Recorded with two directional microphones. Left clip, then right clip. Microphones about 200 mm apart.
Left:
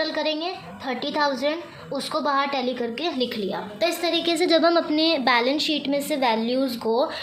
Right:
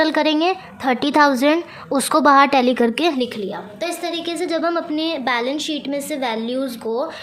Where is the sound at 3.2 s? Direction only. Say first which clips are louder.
Right 2 dB; 25° right (ahead or behind).